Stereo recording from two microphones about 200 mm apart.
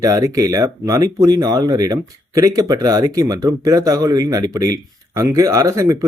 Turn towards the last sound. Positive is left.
turn(degrees=-15)  # may be behind; listen again after turning